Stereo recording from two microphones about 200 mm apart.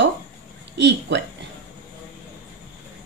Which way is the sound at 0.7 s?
60° right (ahead or behind).